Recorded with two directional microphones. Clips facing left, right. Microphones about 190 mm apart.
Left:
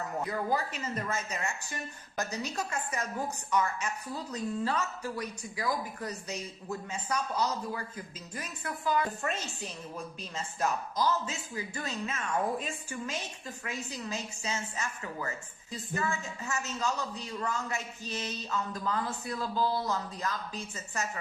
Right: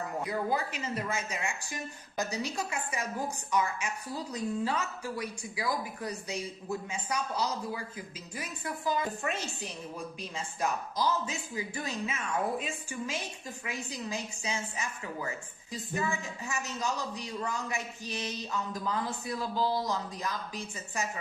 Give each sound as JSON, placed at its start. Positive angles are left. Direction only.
{"t": 0.2, "sound": "a woman's voice", "side_deg": -10}